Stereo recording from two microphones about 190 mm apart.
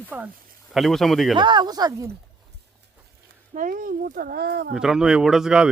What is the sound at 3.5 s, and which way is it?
Speech, 45° right (ahead or behind).